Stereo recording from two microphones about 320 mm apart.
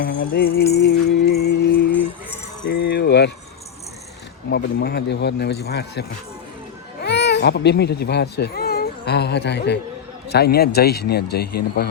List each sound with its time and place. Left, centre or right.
0.0 s a man's voice: left
0.7 s music: left
2.6 s a sound: left
4.5 s a man's voice: left